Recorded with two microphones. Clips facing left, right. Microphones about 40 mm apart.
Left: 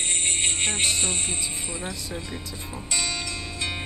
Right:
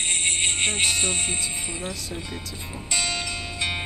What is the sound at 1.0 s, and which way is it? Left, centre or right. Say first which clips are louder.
Speech: right 2 dB; right.